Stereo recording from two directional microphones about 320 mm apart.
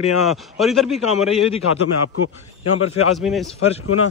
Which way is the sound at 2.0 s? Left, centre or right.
Left.